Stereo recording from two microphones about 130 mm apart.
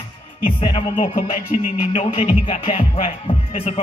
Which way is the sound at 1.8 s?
45° left (ahead or behind).